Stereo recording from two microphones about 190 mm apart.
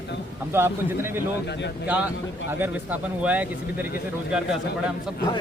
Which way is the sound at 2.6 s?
10° right (ahead or behind).